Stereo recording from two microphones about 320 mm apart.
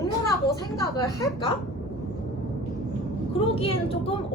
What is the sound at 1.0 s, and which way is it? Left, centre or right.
Speech, centre.